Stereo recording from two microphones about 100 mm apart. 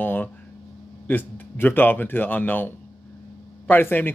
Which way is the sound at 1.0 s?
20° left (ahead or behind).